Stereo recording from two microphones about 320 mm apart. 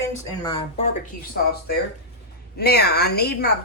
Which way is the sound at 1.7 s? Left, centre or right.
Left.